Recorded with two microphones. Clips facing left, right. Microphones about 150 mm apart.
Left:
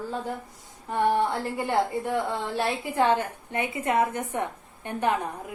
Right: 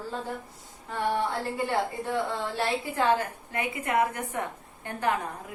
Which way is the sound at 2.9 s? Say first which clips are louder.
Left 3 dB; 25° left (ahead or behind).